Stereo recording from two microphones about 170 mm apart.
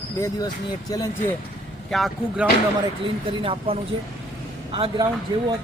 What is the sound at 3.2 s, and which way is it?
A man's voice, 30° right (ahead or behind).